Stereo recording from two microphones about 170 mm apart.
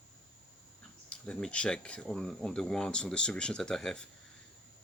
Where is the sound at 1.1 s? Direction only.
5° left (ahead or behind).